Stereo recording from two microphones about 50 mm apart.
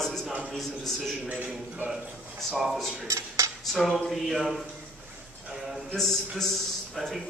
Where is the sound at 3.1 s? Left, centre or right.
Right.